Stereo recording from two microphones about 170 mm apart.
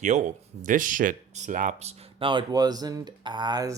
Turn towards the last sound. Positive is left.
turn(degrees=-25)  # may be behind; listen again after turning